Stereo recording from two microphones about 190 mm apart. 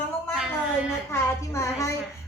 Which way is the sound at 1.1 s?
15° left (ahead or behind).